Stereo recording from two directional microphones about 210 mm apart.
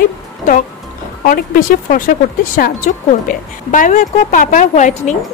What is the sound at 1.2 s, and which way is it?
A woman's voice, 40° left (ahead or behind).